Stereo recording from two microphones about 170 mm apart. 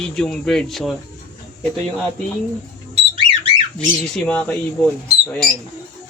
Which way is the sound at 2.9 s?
30° right (ahead or behind).